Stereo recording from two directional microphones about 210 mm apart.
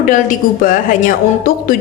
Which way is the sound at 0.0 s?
40° left (ahead or behind).